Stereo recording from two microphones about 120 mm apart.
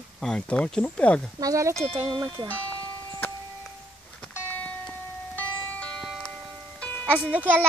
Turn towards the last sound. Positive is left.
turn(degrees=-15)  # may be behind; listen again after turning